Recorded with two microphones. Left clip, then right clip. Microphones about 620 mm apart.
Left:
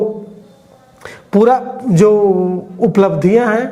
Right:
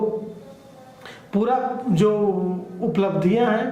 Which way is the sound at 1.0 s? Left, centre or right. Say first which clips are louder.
Left 13 dB; left.